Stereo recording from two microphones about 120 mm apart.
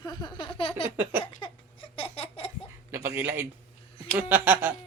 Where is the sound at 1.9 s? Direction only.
50° left (ahead or behind).